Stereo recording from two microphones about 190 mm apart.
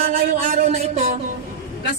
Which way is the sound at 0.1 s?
35° right (ahead or behind).